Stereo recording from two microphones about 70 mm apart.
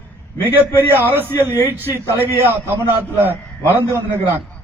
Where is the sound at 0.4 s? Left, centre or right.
Right.